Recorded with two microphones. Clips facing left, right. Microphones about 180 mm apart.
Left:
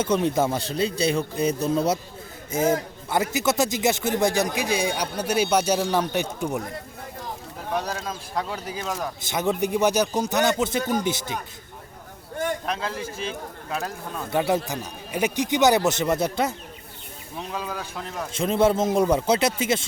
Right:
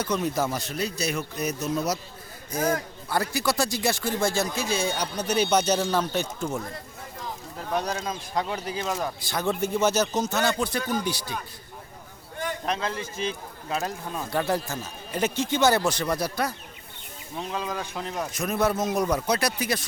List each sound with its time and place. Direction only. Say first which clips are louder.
0.0 s a man's voice: left 4 dB; 25° left (ahead or behind)
7.8 s speech: right 2 dB; 5° left (ahead or behind)
9.2 s a man's voice: left 5 dB; 20° left (ahead or behind)
12.6 s speech: even; 5° left (ahead or behind)
14.3 s a man's voice: left 4 dB; 20° left (ahead or behind)
17.3 s speech: right 1 dB; 5° left (ahead or behind)
18.3 s a man's voice: left 6 dB; 25° left (ahead or behind)